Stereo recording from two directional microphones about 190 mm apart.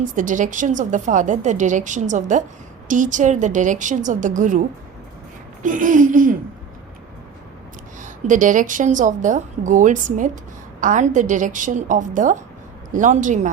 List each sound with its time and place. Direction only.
0.0 s a woman's voice: 45° right (ahead or behind)
5.6 s a woman's voice: 45° right (ahead or behind)
8.0 s a woman's voice: 40° right (ahead or behind)